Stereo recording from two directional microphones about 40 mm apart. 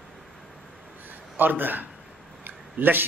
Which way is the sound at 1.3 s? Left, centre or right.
Right.